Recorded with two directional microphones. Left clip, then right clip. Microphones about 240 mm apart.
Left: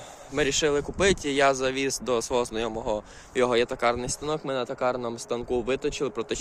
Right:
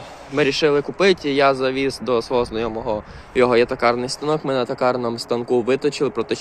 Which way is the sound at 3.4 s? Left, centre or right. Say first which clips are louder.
Right 7 dB; centre.